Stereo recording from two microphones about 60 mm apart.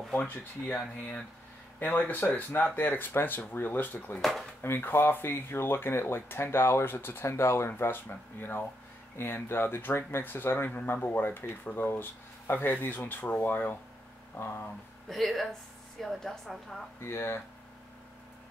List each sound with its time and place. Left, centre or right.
0.2 s speech: left
4.2 s a woman's voice: centre
4.6 s speech: left
15.0 s a woman's voice: centre
17.0 s speech: left